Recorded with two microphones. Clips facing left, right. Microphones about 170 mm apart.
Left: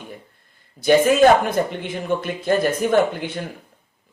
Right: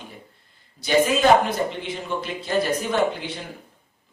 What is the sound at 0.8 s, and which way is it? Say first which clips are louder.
Speech: left 5 dB; 50° left (ahead or behind).